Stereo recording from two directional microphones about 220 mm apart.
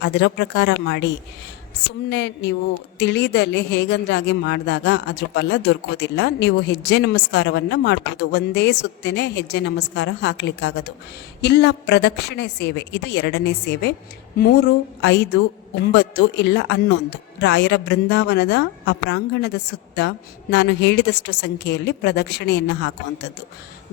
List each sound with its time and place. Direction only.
0.0 s speech: 50° left (ahead or behind)